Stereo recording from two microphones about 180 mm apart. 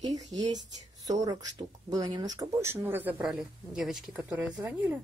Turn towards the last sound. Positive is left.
turn(degrees=-10)  # may be behind; listen again after turning